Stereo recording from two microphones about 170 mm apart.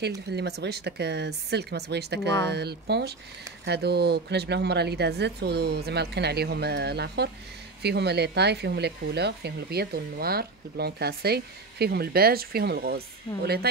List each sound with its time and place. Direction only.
0.3 s speech: 75° right (ahead or behind)